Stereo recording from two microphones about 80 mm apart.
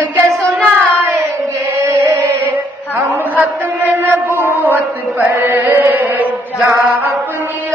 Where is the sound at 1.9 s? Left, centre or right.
Right.